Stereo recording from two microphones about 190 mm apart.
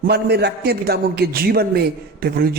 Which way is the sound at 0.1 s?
60° right (ahead or behind).